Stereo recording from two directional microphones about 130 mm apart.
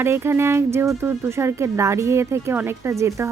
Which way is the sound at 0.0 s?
20° right (ahead or behind).